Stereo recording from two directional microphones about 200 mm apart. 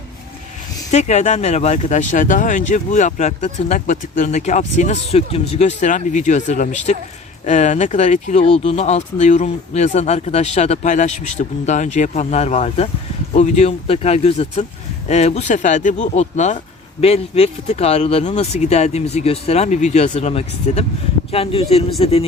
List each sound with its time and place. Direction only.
0.9 s speech: 35° left (ahead or behind)